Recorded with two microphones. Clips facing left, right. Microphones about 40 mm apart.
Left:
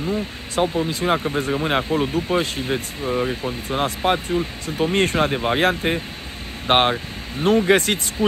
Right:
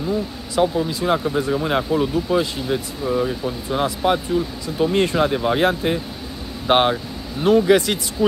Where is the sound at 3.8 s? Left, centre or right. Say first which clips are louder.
Right 1 dB; left.